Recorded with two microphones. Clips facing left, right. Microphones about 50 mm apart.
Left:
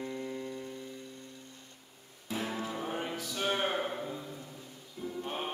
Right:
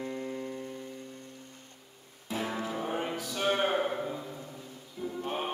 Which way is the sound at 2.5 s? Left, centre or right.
Centre.